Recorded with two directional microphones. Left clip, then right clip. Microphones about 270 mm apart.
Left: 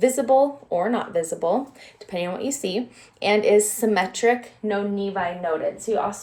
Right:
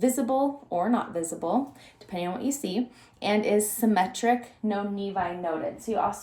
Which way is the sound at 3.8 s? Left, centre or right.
Centre.